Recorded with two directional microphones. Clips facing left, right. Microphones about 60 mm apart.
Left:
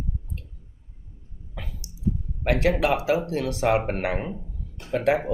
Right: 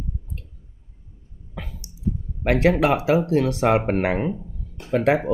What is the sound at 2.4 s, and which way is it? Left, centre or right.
Speech, right.